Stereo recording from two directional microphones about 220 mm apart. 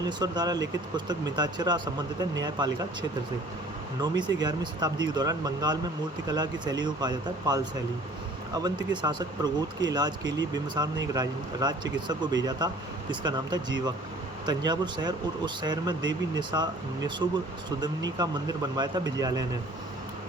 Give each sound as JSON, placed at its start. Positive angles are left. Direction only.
{"t": 0.0, "sound": "speech", "side_deg": -20}
{"t": 4.0, "sound": "speech", "side_deg": -20}